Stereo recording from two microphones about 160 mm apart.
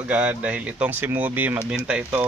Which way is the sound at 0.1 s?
10° right (ahead or behind).